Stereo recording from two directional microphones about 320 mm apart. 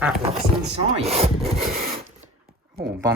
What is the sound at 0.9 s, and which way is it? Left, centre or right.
Speech, centre.